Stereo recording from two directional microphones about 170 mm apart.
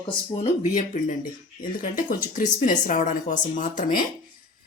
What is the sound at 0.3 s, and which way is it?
Speech, 45° left (ahead or behind).